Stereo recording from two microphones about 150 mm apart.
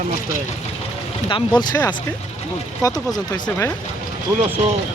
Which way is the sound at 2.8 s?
25° left (ahead or behind).